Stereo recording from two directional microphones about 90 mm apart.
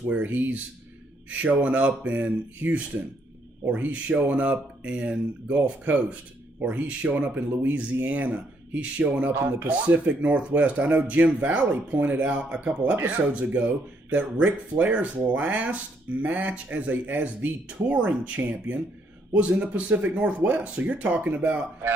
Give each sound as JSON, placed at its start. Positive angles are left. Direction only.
{"t": 0.1, "sound": "speech", "side_deg": -15}